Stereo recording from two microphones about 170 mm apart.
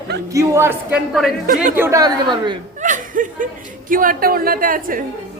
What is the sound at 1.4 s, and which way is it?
Speech, 50° right (ahead or behind).